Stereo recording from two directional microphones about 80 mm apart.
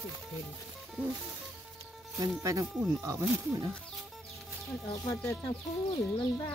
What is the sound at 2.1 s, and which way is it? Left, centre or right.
Speech, right.